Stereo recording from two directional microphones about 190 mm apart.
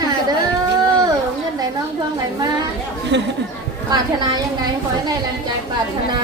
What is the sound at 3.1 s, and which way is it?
Speech, 65° right (ahead or behind).